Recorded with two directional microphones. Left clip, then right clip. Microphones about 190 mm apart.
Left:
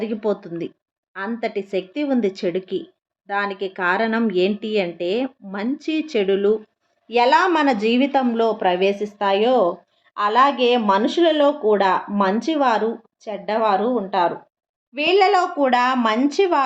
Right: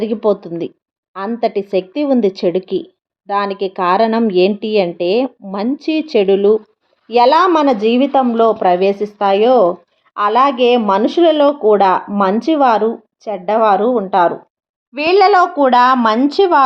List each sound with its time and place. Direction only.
0.0 s speech: 25° right (ahead or behind)
7.6 s speech: 15° right (ahead or behind)